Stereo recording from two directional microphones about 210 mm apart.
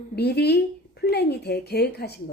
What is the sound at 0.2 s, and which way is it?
A woman's voice, 50° left (ahead or behind).